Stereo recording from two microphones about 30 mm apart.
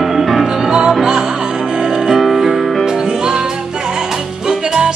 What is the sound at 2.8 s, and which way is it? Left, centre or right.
Music, right.